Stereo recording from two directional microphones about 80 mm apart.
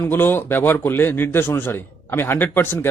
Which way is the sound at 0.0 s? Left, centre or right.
Left.